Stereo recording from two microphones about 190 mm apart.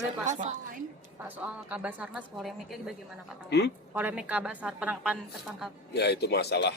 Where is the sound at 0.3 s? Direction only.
40° right (ahead or behind).